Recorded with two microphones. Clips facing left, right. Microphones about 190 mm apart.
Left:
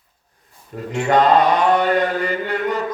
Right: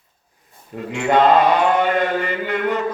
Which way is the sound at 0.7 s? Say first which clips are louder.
Even; 40° left (ahead or behind).